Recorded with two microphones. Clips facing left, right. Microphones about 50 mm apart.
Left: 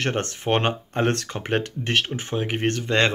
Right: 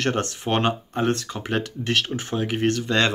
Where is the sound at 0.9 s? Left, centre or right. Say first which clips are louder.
Even; left.